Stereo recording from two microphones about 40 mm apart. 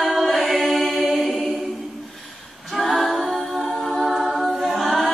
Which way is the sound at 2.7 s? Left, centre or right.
Centre.